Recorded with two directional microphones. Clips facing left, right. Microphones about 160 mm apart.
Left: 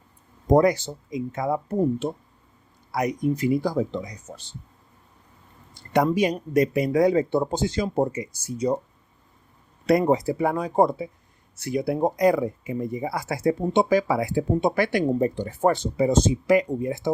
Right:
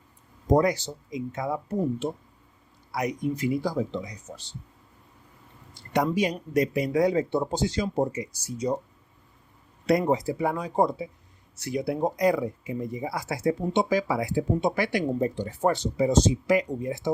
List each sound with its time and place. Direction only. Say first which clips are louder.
0.4 s speech: left 4 dB; 55° left (ahead or behind)
5.9 s speech: left 4 dB; 55° left (ahead or behind)
9.8 s speech: left 3 dB; 55° left (ahead or behind)